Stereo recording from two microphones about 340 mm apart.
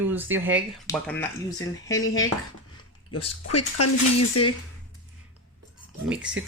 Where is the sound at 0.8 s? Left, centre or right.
Centre.